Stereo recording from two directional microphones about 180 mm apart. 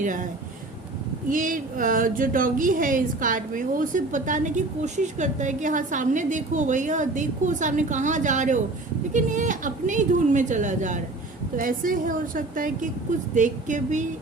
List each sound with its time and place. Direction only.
0.0 s speech: 45° right (ahead or behind)
1.3 s speech: 50° right (ahead or behind)